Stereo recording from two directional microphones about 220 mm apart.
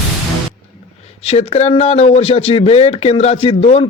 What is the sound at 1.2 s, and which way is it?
Speech, 25° left (ahead or behind).